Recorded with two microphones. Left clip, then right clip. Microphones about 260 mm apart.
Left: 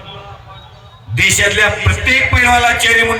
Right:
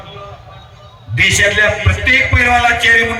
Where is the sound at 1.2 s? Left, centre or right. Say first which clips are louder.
Even; centre.